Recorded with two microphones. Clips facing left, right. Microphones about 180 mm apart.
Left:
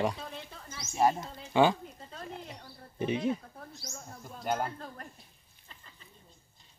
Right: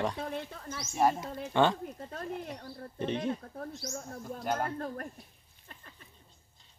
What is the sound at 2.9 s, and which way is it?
Speech, 10° left (ahead or behind).